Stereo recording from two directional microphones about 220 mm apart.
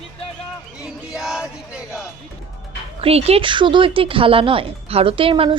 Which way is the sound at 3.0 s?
25° right (ahead or behind).